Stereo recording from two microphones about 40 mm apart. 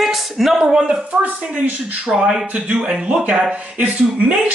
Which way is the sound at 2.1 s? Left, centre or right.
Centre.